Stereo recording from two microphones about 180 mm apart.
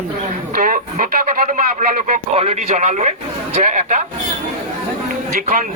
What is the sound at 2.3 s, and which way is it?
A man's voice, 35° right (ahead or behind).